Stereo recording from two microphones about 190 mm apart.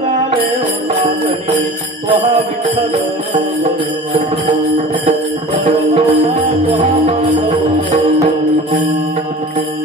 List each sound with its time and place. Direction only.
5.7 s music: 35° right (ahead or behind)
7.3 s music: 25° right (ahead or behind)